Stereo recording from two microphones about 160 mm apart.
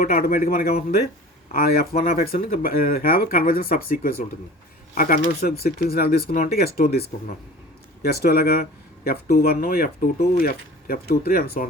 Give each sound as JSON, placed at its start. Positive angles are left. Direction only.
{"t": 0.0, "sound": "speech", "side_deg": 65}